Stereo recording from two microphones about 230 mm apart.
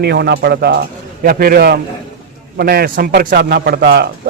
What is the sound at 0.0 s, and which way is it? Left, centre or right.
A man's voice, right.